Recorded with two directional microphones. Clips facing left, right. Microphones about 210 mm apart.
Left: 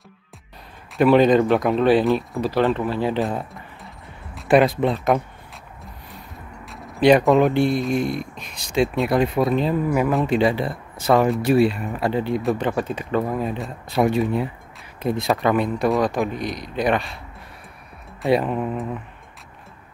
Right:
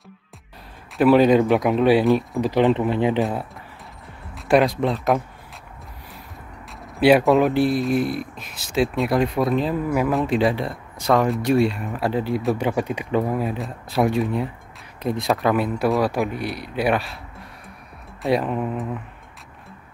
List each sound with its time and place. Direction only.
0.9 s speech: 5° right (ahead or behind); by 3.2 s 20° right (ahead or behind)
3.2 s speech: centre (ahead or behind)
6.7 s speech: centre (ahead or behind)
12.5 s speech: 10° right (ahead or behind)
18.2 s speech: centre (ahead or behind)